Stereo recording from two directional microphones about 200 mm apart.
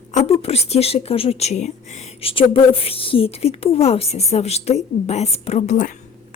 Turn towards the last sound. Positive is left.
turn(degrees=40)  # may be behind; listen again after turning